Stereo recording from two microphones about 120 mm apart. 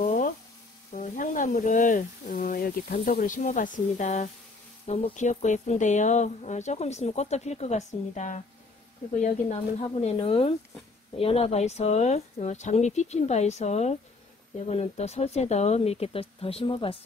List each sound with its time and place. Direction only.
1.0 s speech: 90° left
4.8 s speech: 65° left (ahead or behind)
9.2 s speech: 65° left (ahead or behind); by 16.9 s 50° left (ahead or behind)